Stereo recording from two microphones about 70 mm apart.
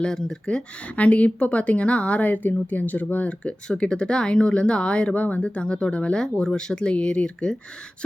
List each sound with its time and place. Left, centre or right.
0.0 s speech: centre